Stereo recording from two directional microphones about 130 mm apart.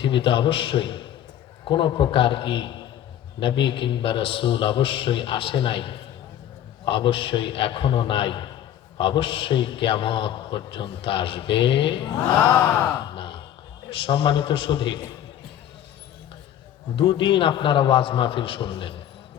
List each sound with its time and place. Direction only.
0.0 s a man's voice: 40° left (ahead or behind)
12.5 s gasp: 10° left (ahead or behind)
13.1 s a sound: 40° left (ahead or behind)
13.9 s a man's voice: 40° left (ahead or behind)
16.9 s a man's voice: 40° left (ahead or behind)